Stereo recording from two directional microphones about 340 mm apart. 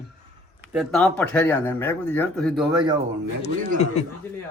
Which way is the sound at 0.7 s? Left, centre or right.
Centre.